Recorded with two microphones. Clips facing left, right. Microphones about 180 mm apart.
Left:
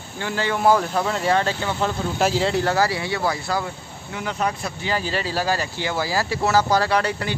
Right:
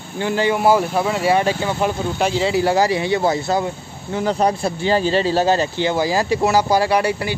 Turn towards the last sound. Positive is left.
turn(degrees=-10)  # may be behind; listen again after turning